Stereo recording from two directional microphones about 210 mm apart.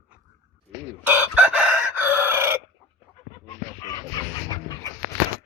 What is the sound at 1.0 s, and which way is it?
Chicken, 5° right (ahead or behind).